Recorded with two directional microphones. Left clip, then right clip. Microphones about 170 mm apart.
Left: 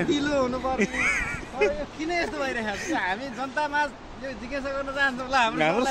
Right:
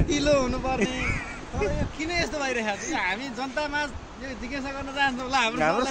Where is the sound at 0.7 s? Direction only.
50° left (ahead or behind).